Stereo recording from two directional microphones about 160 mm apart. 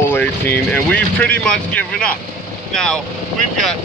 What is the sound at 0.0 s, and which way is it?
Speech, 15° left (ahead or behind).